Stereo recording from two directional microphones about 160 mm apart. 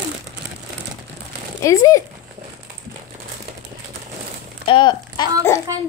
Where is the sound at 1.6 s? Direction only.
20° left (ahead or behind).